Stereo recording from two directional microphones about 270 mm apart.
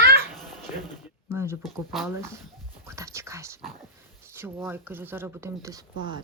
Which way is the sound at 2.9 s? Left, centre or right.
Centre.